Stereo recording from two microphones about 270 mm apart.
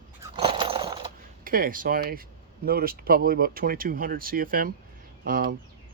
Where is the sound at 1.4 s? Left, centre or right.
Right.